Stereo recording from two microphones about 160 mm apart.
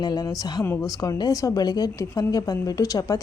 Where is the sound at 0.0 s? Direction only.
25° left (ahead or behind).